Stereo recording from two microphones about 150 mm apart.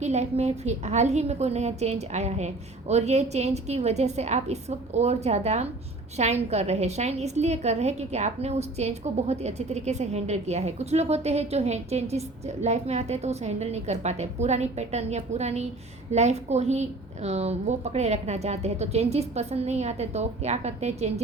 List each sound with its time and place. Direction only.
0.0 s a woman's voice: 50° right (ahead or behind)